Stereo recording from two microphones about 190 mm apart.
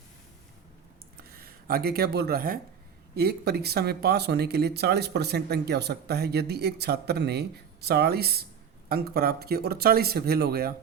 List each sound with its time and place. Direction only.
1.3 s speech: 55° right (ahead or behind)